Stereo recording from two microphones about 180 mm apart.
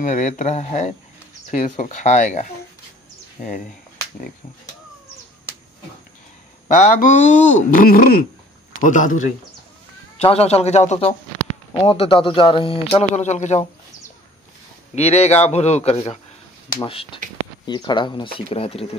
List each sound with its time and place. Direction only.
0.0 s a man's voice: 45° left (ahead or behind)
6.7 s speech: 45° left (ahead or behind)
7.7 s speech: 55° left (ahead or behind)
8.8 s speech: 45° left (ahead or behind)
10.1 s a man's voice: 35° left (ahead or behind)
15.0 s a man's voice: 35° left (ahead or behind)